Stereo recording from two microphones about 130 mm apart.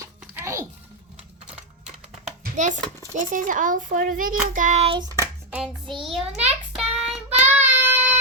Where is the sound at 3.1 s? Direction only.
90° right.